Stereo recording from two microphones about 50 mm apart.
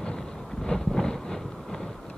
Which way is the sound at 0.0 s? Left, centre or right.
Centre.